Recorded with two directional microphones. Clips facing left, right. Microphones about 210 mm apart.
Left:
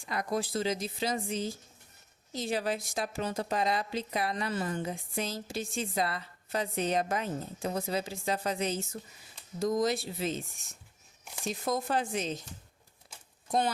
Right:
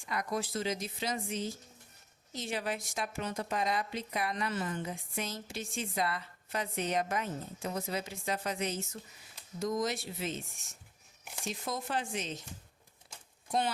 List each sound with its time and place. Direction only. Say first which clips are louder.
0.1 s a woman's voice: left 3 dB; 30° left (ahead or behind)
11.6 s a woman's voice: left 6 dB; 40° left (ahead or behind)